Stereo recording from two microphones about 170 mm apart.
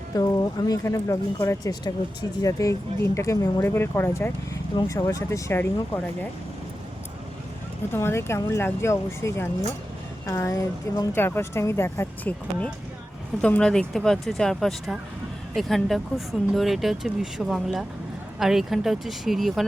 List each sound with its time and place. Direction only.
0.2 s speech: 20° left (ahead or behind)
7.9 s speech: 15° left (ahead or behind); by 19.6 s centre (ahead or behind)